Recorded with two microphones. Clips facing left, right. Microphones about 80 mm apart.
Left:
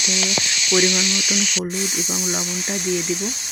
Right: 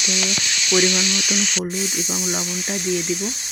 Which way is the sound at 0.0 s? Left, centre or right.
Left.